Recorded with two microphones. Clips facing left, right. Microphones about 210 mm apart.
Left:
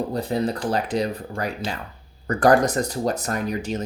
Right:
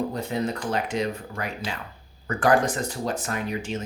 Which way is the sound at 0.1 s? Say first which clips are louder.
Left 4 dB; 35° left (ahead or behind).